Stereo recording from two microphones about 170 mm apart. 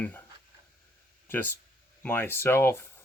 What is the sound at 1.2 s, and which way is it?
Speech, 10° left (ahead or behind).